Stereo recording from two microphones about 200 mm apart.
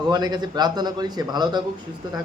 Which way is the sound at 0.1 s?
20° right (ahead or behind).